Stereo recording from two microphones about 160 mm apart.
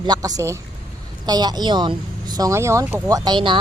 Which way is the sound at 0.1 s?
25° right (ahead or behind).